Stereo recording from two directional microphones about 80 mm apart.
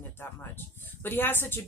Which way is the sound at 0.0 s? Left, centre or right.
Left.